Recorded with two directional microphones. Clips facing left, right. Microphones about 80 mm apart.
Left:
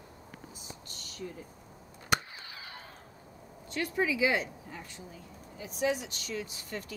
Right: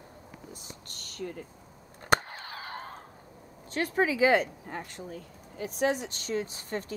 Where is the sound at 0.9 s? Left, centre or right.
Right.